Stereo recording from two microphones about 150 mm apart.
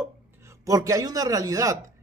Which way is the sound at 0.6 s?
25° right (ahead or behind).